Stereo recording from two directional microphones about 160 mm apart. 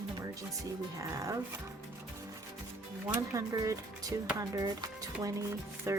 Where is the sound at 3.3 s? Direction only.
20° right (ahead or behind).